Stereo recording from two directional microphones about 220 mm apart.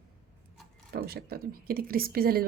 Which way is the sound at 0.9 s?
45° right (ahead or behind).